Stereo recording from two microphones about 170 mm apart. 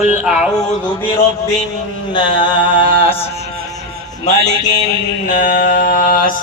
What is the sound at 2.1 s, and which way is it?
Mantra, 30° left (ahead or behind).